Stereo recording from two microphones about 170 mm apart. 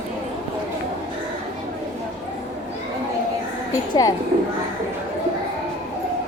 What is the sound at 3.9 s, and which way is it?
Speech, 20° left (ahead or behind).